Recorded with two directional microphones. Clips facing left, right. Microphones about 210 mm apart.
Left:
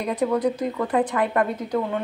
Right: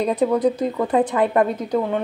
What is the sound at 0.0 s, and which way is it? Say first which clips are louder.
A woman's voice: right 4 dB; 20° right (ahead or behind).